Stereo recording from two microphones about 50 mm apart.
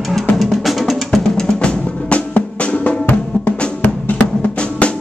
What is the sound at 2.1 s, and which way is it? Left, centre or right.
Music, left.